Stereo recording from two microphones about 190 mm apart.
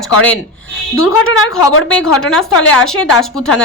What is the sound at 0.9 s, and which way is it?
Speech, 90° left.